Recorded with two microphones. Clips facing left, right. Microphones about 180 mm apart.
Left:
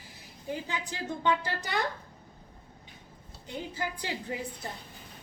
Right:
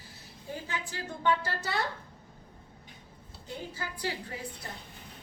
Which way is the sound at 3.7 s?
20° left (ahead or behind).